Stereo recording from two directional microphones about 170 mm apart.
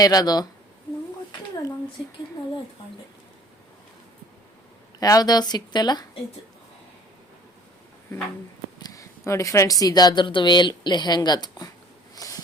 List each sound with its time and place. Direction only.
0.0 s speech: 25° left (ahead or behind)
4.9 s speech: 20° left (ahead or behind)
8.8 s speech: 20° left (ahead or behind)
12.1 s a sound: 20° left (ahead or behind)